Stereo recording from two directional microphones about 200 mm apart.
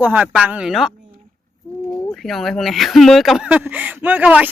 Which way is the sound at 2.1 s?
Centre (ahead or behind).